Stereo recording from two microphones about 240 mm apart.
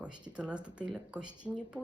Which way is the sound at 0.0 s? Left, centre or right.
Centre.